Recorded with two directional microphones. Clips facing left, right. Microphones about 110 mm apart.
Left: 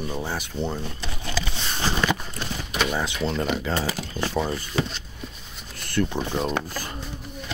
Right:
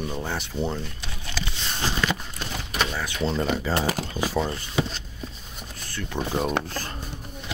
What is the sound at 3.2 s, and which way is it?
Speech, centre (ahead or behind).